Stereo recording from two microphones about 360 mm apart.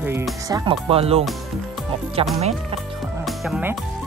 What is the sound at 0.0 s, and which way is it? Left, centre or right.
Music, centre.